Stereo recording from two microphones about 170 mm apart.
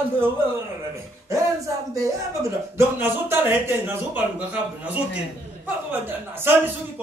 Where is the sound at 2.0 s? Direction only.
15° right (ahead or behind).